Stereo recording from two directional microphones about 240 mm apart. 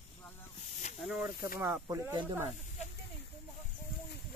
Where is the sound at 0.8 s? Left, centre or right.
Left.